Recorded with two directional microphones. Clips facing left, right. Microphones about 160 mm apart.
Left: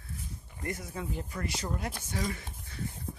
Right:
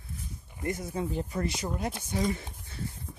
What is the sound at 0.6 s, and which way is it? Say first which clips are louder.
Speech: right 5 dB; 25° right (ahead or behind).